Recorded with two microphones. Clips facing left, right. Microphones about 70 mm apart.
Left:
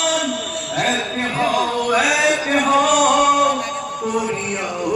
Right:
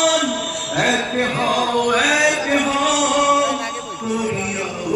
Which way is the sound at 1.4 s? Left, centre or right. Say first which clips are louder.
Left 1 dB; centre.